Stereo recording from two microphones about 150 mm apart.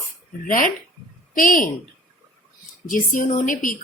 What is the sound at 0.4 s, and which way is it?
A woman's voice, 65° left (ahead or behind).